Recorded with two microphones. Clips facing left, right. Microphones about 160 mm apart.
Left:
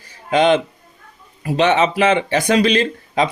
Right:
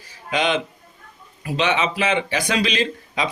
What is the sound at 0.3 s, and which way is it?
A man's voice, 50° left (ahead or behind).